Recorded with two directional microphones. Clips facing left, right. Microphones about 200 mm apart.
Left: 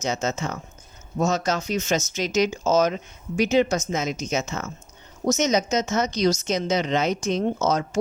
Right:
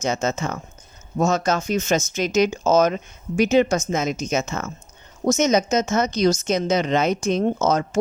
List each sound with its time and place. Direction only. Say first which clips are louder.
0.0 s speech: right 3 dB; 50° right (ahead or behind)